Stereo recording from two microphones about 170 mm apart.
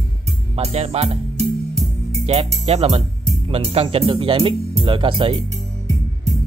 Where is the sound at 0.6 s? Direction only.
40° right (ahead or behind).